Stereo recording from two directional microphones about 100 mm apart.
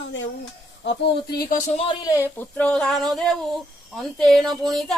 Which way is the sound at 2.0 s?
40° left (ahead or behind).